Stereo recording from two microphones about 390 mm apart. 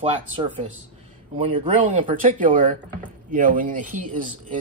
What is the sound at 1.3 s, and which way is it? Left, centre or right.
Speech, centre.